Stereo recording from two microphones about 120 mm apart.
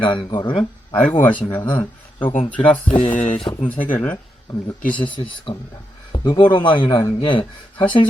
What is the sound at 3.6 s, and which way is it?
Speech, 15° left (ahead or behind).